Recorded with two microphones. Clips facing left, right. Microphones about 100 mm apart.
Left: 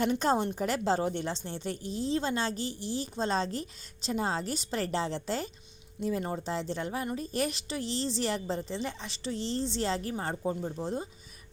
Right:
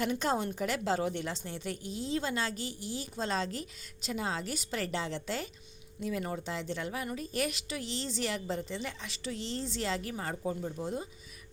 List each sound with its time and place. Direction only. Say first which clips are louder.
0.0 s a woman's voice: left 4 dB; 35° left (ahead or behind)